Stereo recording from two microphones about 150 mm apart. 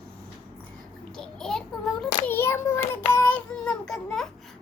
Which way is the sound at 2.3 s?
15° left (ahead or behind).